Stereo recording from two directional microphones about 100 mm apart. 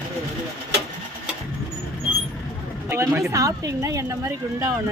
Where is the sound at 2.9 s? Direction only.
25° right (ahead or behind).